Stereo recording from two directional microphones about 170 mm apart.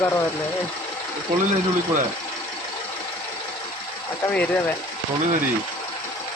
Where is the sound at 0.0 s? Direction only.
15° left (ahead or behind).